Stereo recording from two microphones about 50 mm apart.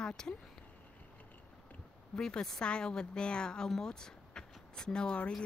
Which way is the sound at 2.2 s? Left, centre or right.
Centre.